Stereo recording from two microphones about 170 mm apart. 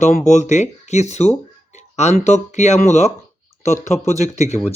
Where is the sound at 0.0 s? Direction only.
45° left (ahead or behind).